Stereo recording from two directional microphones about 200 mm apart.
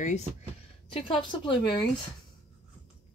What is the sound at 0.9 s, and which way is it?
Speech, 25° left (ahead or behind).